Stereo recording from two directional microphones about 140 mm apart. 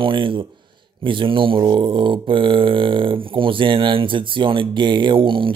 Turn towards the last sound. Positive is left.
turn(degrees=-40)  # may be behind; listen again after turning